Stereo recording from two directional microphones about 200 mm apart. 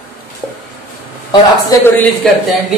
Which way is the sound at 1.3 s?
20° left (ahead or behind).